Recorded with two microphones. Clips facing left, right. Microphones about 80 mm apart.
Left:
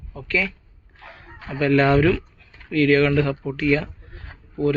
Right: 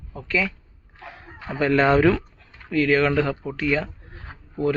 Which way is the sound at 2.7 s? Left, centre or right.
Centre.